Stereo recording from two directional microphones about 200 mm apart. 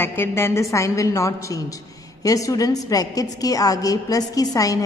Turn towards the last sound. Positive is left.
turn(degrees=15)  # may be behind; listen again after turning